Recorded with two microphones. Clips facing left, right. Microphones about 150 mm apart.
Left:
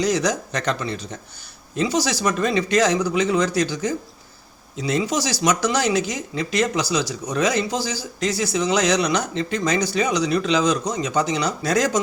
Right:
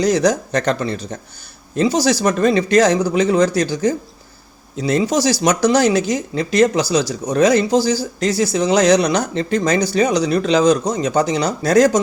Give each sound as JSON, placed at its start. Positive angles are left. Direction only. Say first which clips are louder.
{"t": 0.0, "sound": "speech", "louder": "right 6 dB", "side_deg": -35}